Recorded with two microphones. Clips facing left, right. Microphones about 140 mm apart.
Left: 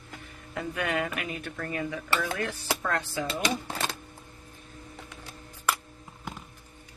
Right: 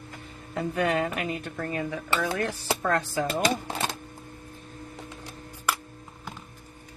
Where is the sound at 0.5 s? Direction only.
35° right (ahead or behind); by 3.6 s 50° right (ahead or behind).